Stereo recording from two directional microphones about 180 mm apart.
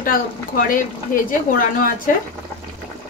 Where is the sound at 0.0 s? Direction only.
50° left (ahead or behind).